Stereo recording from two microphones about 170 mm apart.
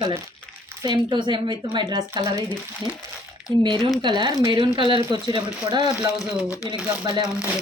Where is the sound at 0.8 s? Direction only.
25° right (ahead or behind).